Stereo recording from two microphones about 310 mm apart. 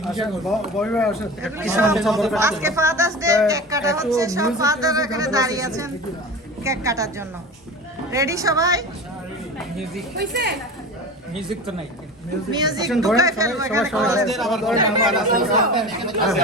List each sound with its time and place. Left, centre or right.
0.0 s speech: centre
9.6 s speech: centre
10.2 s speech: right
11.3 s a man's voice: centre
12.5 s speech: centre
12.9 s a man's voice: centre
13.1 s a man's voice: centre